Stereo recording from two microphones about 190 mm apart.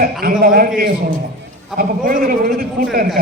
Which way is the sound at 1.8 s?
45° right (ahead or behind).